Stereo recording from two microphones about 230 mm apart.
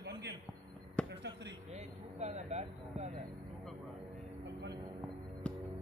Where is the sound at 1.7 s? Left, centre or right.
Right.